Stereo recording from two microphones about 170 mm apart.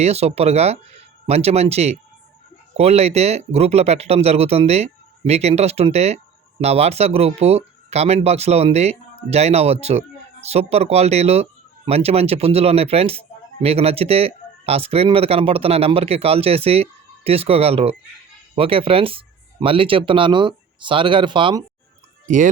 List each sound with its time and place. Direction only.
0.0 s speech: 40° right (ahead or behind)